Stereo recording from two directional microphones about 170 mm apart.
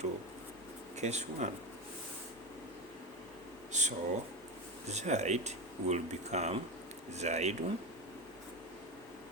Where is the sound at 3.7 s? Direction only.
45° right (ahead or behind).